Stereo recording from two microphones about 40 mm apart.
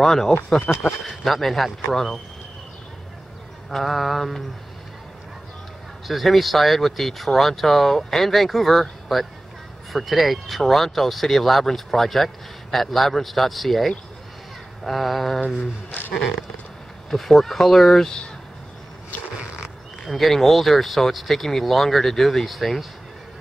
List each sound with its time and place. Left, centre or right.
0.0 s speech: centre
0.7 s a man's voice: left
1.0 s speech: centre
3.7 s speech: centre
6.0 s speech: centre
14.9 s speech: centre
16.1 s speech: centre
20.1 s speech: centre